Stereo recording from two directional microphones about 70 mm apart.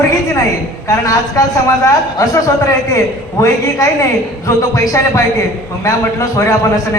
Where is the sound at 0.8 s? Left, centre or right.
Left.